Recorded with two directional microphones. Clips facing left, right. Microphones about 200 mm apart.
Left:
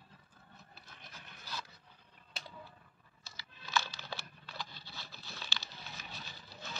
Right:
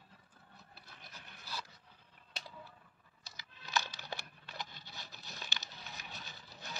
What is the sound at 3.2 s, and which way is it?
Computer keyboard, 15° right (ahead or behind).